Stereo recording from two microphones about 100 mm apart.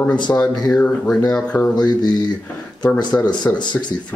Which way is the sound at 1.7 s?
45° left (ahead or behind).